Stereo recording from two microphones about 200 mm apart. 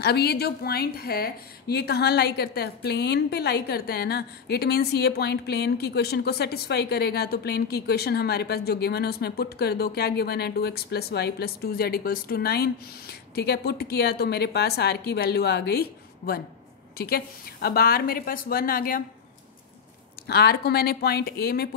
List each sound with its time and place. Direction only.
0.0 s a woman's voice: 55° left (ahead or behind)
20.2 s a woman's voice: 55° left (ahead or behind)